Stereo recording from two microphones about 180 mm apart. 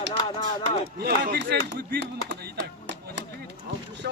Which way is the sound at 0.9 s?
60° right (ahead or behind).